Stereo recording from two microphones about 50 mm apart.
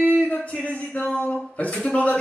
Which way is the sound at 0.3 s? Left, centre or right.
Left.